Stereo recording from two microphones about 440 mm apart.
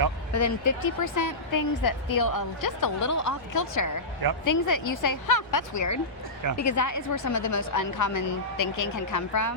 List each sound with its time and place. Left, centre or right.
0.3 s a woman's voice: left